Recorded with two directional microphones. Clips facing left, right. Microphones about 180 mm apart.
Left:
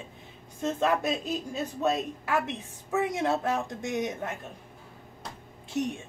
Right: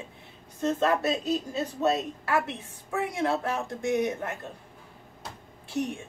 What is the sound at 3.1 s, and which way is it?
Speech, 20° left (ahead or behind).